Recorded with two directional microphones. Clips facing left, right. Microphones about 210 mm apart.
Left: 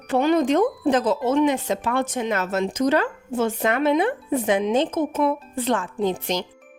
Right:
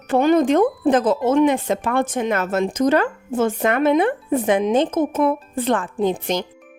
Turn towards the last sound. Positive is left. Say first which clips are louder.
# right 3 dB
turn(degrees=-50)  # may be behind; listen again after turning